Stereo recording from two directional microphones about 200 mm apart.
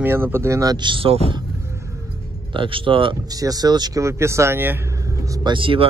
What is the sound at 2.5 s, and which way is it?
Speech, 25° right (ahead or behind).